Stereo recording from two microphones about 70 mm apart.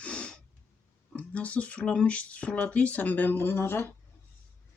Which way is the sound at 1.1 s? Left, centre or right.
Centre.